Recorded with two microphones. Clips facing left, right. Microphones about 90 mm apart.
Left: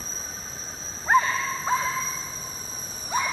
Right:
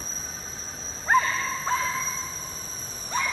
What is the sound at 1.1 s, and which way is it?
Wild animals, 10° left (ahead or behind).